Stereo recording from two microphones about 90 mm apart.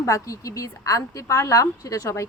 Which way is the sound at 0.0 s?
35° left (ahead or behind).